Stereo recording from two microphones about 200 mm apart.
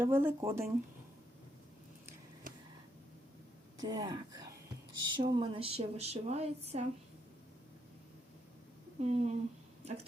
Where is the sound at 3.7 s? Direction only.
20° right (ahead or behind).